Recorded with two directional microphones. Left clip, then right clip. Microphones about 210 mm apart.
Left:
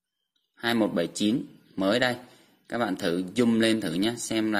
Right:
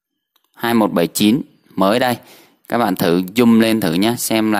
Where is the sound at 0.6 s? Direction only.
45° right (ahead or behind).